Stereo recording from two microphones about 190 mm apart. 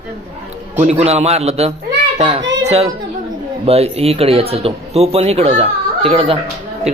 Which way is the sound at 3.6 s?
35° right (ahead or behind).